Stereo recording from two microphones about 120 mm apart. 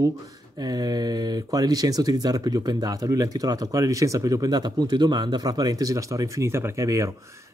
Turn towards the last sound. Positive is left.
turn(degrees=-25)  # may be behind; listen again after turning